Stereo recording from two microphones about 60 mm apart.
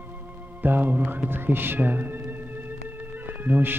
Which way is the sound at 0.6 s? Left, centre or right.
Right.